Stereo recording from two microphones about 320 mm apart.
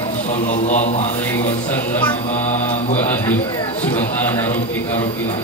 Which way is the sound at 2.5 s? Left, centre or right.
Left.